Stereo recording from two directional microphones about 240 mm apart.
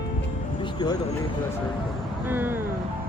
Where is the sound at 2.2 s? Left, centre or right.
Centre.